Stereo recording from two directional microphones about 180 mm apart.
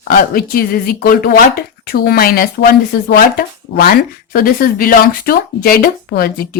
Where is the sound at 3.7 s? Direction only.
70° left (ahead or behind).